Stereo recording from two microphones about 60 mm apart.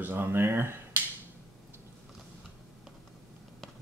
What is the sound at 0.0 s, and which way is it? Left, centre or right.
Speech, right.